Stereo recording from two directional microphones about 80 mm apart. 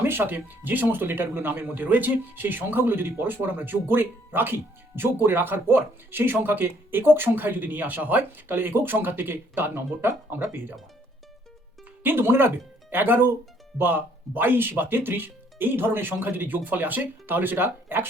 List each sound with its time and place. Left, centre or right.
0.0 s speech: right
12.0 s speech: right